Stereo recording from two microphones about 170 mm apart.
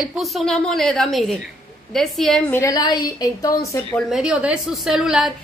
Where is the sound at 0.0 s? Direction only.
Centre (ahead or behind).